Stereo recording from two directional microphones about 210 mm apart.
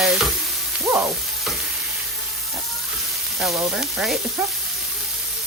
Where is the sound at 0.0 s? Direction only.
Centre (ahead or behind).